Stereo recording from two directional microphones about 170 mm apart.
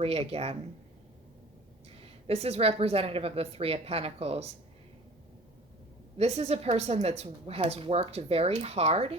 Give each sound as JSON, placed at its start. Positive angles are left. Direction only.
{"t": 0.0, "sound": "a woman's voice", "side_deg": -35}
{"t": 2.2, "sound": "a woman's voice", "side_deg": -35}
{"t": 6.1, "sound": "a woman's voice", "side_deg": -40}